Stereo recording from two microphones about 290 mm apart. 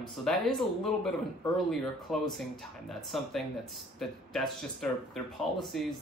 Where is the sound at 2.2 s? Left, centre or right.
Centre.